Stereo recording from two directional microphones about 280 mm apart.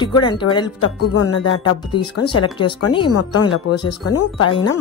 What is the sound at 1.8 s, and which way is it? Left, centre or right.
Speech, centre.